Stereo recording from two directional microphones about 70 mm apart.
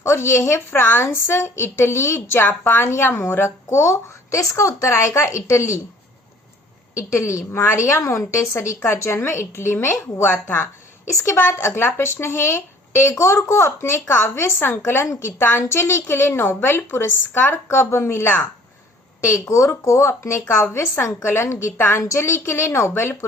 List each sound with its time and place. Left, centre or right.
0.0 s a woman's voice: left
6.9 s a woman's voice: left
19.2 s a woman's voice: left